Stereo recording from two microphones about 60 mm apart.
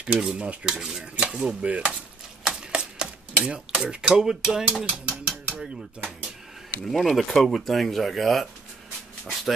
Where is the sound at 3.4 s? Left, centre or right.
Centre.